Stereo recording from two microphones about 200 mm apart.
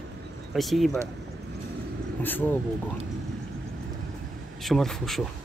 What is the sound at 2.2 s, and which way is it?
Speech, 10° left (ahead or behind).